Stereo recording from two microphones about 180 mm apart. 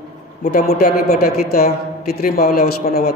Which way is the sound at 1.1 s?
60° left (ahead or behind).